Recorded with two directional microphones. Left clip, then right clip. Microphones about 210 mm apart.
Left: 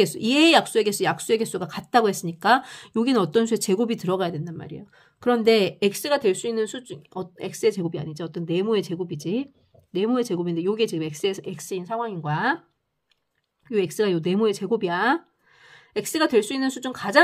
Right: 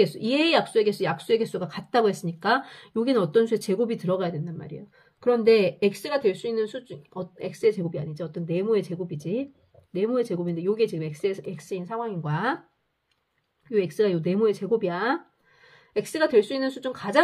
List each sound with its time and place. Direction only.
0.0 s speech: 45° left (ahead or behind); by 12.5 s 30° left (ahead or behind)
13.7 s speech: 40° left (ahead or behind)